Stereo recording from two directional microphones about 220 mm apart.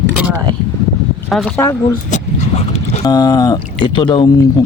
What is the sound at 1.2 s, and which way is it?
Speech, centre (ahead or behind).